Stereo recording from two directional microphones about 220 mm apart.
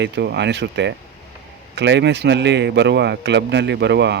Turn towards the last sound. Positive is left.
turn(degrees=-50)  # may be behind; listen again after turning